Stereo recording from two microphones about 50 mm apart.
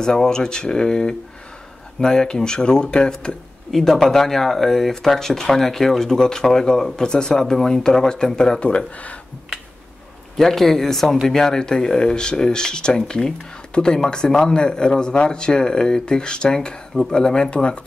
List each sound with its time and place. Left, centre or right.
0.0 s speech: centre
10.3 s speech: centre